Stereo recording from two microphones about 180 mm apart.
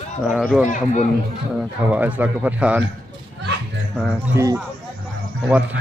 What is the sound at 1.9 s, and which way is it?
Speech, 10° right (ahead or behind).